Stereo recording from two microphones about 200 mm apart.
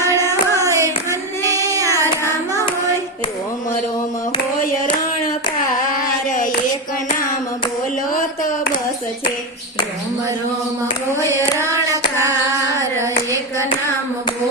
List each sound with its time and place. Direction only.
0.2 s carnatic music: 15° left (ahead or behind)
0.6 s a sound: 15° right (ahead or behind)
1.5 s child singing: 15° right (ahead or behind)
1.9 s hands: 15° right (ahead or behind)
5.9 s carnatic music: 40° left (ahead or behind)
11.2 s hands: 15° right (ahead or behind)